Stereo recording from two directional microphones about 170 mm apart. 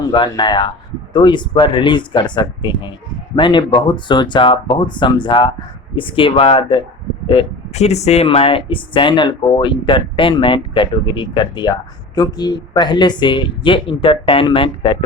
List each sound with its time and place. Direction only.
0.0 s speech: 25° left (ahead or behind)